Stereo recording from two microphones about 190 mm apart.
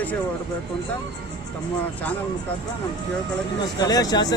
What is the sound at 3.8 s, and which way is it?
Speech, 20° left (ahead or behind).